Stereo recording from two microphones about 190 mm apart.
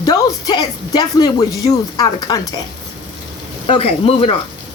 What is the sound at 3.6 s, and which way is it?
Speech, 30° left (ahead or behind).